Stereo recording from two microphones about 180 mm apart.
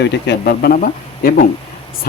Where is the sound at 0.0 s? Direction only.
65° left (ahead or behind).